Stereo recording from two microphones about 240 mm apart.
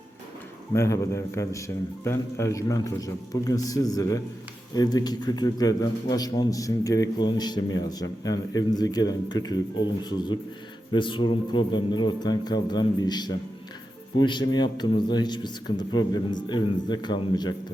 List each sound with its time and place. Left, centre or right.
0.7 s a man's voice: centre